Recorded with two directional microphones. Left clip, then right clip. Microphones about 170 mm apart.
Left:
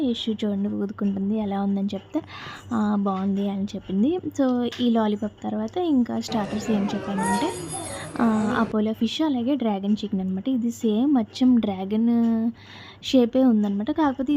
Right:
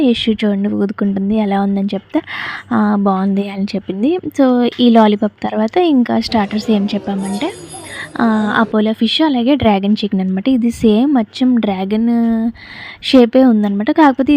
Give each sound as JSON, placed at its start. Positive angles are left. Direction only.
{"t": 0.0, "sound": "a woman's voice", "side_deg": -30}
{"t": 8.1, "sound": "a woman's voice", "side_deg": -30}